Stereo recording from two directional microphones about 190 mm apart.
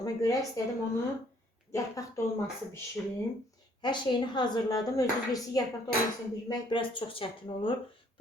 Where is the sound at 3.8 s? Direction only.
25° left (ahead or behind).